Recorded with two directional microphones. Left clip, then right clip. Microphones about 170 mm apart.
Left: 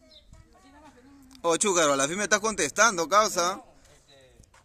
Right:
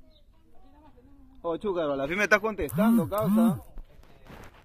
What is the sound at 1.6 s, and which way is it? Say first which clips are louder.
Speech: left 5 dB; 30° left (ahead or behind).